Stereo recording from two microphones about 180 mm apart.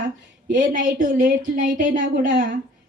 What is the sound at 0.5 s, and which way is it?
A woman's voice, 45° right (ahead or behind).